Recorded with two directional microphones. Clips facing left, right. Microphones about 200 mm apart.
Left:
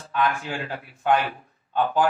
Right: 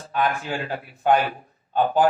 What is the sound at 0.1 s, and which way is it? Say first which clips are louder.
A man's voice: right 1 dB; 40° right (ahead or behind).